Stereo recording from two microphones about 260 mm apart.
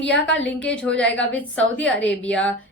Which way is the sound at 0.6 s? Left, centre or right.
Centre.